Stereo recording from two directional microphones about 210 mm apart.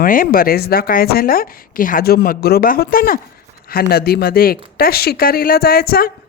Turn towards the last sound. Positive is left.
turn(degrees=45)  # may be behind; listen again after turning